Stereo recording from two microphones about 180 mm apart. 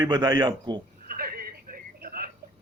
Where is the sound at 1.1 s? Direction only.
55° right (ahead or behind).